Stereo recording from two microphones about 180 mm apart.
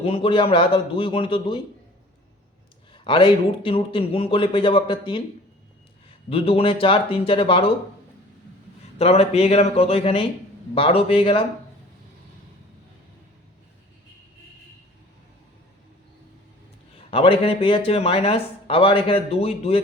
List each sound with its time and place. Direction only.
0.0 s a man's voice: 30° left (ahead or behind)
2.9 s a man's voice: 30° left (ahead or behind)
6.3 s speech: 30° left (ahead or behind)
9.0 s speech: 35° left (ahead or behind)
17.1 s speech: 30° left (ahead or behind)